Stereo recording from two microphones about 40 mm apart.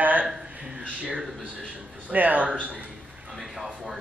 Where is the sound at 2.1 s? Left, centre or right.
Right.